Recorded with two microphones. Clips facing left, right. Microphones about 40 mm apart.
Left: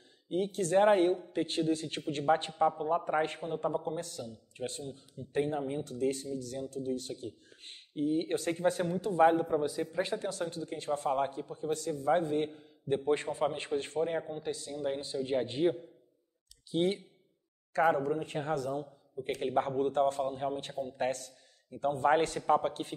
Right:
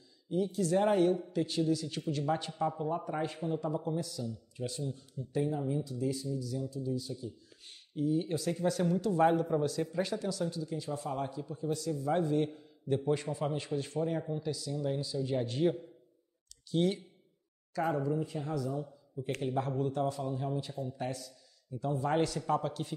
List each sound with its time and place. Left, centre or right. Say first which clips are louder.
0.3 s a man's voice: left 1 dB; left
3.1 s a man's voice: left 3 dB; left
5.4 s a man's voice: left 1 dB; left
7.7 s speech: left 1 dB; left
8.8 s a man's voice: left 1 dB; left
10.1 s a man's voice: even; left
16.7 s a man's voice: even; left
17.7 s a man's voice: left 4 dB; left
19.4 s a man's voice: left 4 dB; left